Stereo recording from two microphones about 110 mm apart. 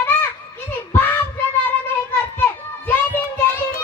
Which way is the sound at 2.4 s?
20° left (ahead or behind).